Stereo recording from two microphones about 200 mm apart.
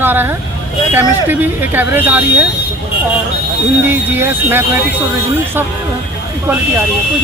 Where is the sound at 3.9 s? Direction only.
10° right (ahead or behind).